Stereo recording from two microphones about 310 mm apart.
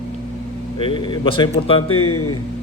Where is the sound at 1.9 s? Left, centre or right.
Left.